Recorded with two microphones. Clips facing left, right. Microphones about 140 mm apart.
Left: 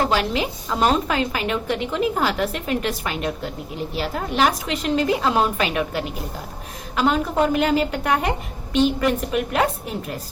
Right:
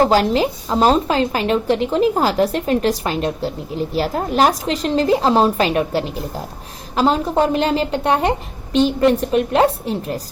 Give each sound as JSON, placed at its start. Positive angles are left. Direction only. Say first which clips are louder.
{"t": 0.0, "sound": "a woman's voice", "louder": "right 7 dB", "side_deg": -40}